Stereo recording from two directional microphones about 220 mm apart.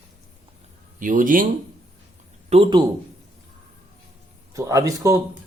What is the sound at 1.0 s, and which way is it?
Speech, 35° right (ahead or behind).